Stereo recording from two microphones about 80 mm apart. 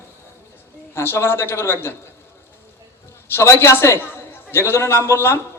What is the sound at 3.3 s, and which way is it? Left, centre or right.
A man's voice, left.